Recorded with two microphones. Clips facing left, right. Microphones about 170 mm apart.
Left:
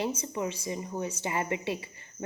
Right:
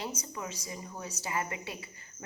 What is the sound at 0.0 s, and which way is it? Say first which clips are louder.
Speech: left 8 dB; 25° left (ahead or behind).